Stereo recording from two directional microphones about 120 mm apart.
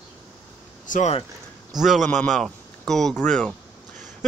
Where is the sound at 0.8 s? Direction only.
90° left.